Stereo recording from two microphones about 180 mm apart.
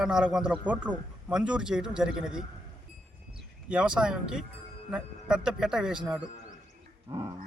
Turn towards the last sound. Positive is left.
turn(degrees=-20)  # may be behind; listen again after turning